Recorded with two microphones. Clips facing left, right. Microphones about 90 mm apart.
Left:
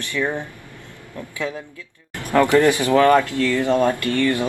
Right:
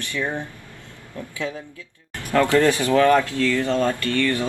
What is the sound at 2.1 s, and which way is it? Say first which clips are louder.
Speech: left 2 dB; 15° left (ahead or behind).